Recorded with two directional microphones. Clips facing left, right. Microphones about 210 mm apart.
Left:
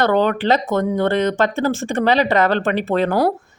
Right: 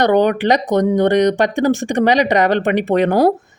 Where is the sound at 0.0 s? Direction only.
15° right (ahead or behind).